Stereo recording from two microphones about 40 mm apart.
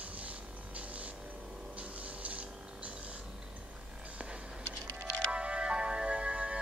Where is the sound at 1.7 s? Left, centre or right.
Right.